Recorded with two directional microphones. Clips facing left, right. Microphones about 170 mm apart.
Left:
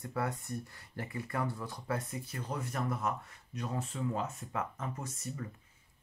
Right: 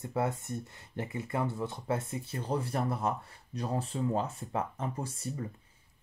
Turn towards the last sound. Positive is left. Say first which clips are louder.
# right 4 dB
turn(degrees=-30)  # may be behind; listen again after turning